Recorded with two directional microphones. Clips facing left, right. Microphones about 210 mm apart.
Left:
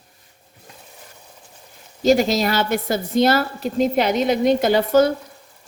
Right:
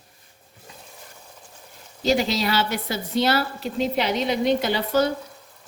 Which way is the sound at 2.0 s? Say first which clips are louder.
Left 5 dB; 45° left (ahead or behind).